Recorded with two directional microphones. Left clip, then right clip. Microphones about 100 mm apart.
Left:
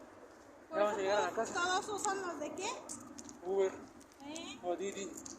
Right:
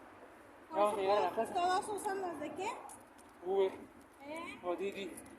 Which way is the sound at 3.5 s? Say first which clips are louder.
Right 1 dB; 35° right (ahead or behind).